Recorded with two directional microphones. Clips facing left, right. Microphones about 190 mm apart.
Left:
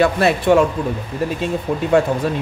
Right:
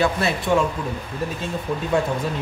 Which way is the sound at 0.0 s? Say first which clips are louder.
Left 6 dB; 60° left (ahead or behind).